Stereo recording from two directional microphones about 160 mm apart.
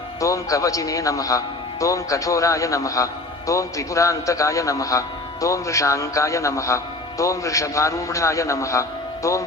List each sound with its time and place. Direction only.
0.2 s a man's voice: 20° left (ahead or behind)